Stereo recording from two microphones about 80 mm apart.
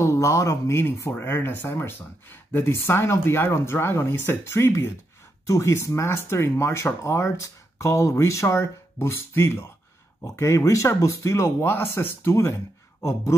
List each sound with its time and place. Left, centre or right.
0.0 s speech: left